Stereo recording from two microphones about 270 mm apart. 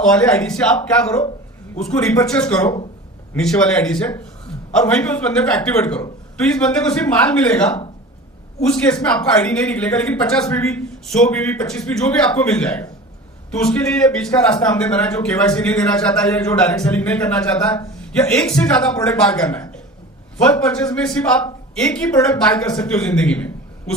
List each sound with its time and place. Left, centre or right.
0.0 s a man's voice: centre